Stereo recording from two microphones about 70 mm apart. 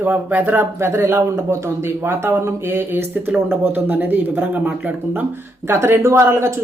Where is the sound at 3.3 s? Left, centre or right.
Right.